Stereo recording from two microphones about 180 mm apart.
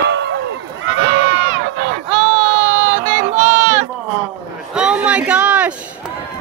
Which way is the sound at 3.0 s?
30° right (ahead or behind).